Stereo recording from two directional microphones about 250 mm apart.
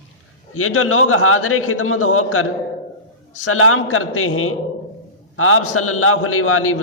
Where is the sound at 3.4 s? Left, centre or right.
Left.